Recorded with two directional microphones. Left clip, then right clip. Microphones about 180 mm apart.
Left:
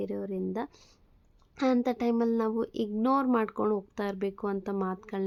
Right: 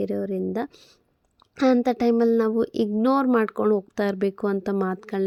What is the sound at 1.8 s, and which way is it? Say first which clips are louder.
Speech: right 8 dB; 30° right (ahead or behind).